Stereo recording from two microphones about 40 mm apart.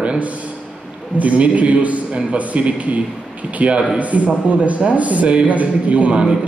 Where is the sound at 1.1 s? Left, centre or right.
Right.